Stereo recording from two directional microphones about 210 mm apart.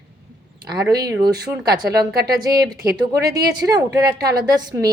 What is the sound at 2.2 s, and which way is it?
A woman's voice, 20° right (ahead or behind).